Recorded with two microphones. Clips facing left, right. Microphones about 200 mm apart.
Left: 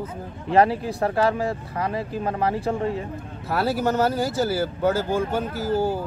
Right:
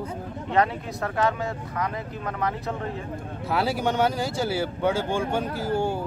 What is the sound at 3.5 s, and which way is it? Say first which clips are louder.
Speech: left 2 dB; centre (ahead or behind).